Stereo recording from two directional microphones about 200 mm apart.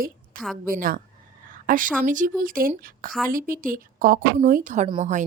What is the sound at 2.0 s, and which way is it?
A woman's voice, 40° right (ahead or behind).